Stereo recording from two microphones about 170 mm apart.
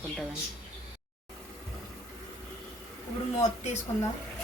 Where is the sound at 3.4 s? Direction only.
40° left (ahead or behind).